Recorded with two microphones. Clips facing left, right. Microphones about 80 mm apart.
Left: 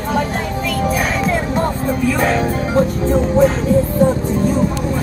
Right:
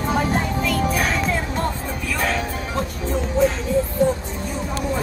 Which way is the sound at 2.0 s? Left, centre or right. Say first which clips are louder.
Left 7 dB; left.